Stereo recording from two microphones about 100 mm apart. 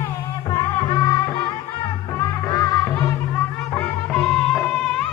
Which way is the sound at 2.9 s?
20° left (ahead or behind).